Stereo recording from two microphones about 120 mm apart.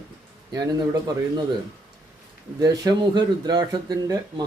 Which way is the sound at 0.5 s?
30° right (ahead or behind).